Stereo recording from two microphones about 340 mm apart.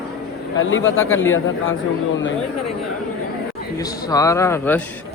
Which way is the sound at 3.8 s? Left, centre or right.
Centre.